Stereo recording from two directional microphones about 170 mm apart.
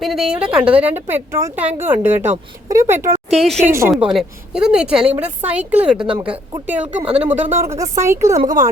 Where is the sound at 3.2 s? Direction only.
Centre (ahead or behind).